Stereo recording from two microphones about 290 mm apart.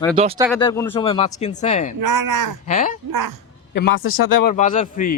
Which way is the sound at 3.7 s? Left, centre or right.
Left.